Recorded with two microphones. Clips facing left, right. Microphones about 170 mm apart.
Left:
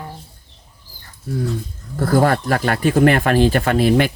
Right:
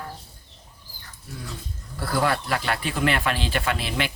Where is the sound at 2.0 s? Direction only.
45° left (ahead or behind).